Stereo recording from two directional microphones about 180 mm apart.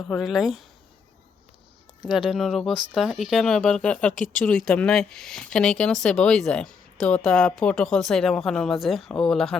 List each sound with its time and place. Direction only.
0.1 s speech: centre (ahead or behind)
2.1 s speech: centre (ahead or behind)
4.2 s speech: 45° left (ahead or behind)
4.4 s speech: 5° left (ahead or behind)